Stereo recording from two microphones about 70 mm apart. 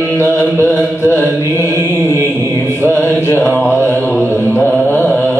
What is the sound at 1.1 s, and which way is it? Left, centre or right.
Mantra, left.